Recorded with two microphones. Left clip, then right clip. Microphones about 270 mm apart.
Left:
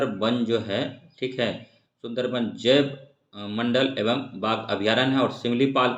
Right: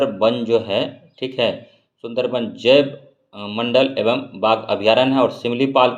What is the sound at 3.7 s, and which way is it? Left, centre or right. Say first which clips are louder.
Speech: right 8 dB; centre.